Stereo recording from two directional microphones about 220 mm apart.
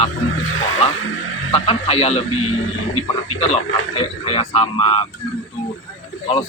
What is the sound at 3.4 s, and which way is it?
Speech, 30° left (ahead or behind).